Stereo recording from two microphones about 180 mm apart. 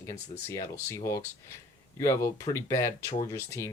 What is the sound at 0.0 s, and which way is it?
Speech, 15° left (ahead or behind).